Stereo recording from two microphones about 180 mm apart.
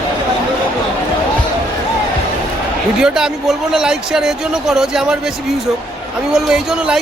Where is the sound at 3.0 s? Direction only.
5° right (ahead or behind).